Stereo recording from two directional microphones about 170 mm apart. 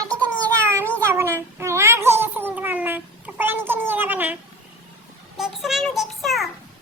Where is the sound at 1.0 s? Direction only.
15° right (ahead or behind).